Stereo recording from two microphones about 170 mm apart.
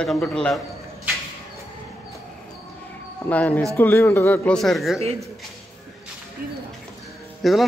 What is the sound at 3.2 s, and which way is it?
Speech, 10° left (ahead or behind).